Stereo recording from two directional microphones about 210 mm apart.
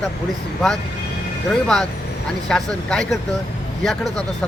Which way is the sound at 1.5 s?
5° left (ahead or behind).